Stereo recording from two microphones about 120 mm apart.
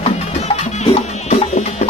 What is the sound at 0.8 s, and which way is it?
Music, 65° left (ahead or behind).